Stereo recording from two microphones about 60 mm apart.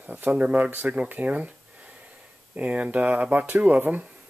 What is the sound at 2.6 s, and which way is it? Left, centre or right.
Speech, right.